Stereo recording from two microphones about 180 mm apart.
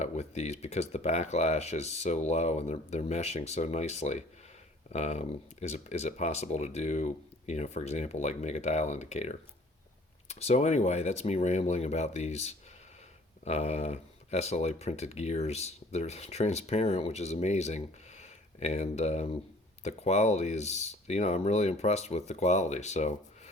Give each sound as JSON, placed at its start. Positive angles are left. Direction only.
{"t": 0.0, "sound": "speech", "side_deg": 40}